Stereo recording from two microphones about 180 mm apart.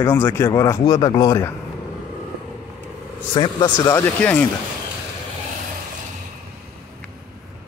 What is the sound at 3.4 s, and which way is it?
Speech, 25° left (ahead or behind).